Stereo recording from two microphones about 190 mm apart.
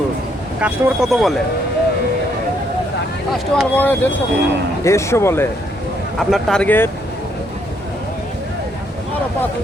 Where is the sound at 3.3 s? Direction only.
5° left (ahead or behind).